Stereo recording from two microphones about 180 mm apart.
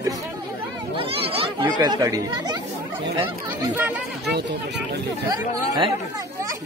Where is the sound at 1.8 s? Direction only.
20° right (ahead or behind).